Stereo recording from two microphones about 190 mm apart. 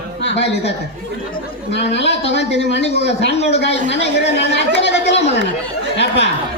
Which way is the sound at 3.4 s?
65° left (ahead or behind).